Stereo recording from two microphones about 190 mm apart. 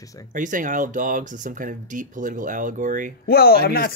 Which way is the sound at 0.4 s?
45° right (ahead or behind).